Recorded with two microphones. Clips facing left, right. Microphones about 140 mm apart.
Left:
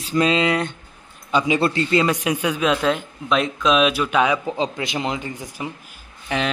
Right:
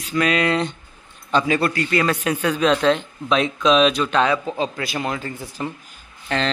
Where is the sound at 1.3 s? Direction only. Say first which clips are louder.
Even; 15° left (ahead or behind).